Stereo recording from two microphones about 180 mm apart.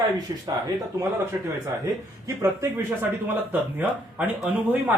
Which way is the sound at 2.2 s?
15° right (ahead or behind).